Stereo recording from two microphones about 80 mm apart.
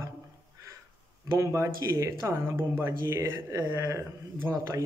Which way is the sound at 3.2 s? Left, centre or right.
Right.